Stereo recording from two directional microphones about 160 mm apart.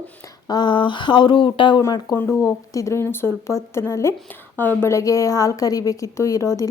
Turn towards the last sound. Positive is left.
turn(degrees=20)  # may be behind; listen again after turning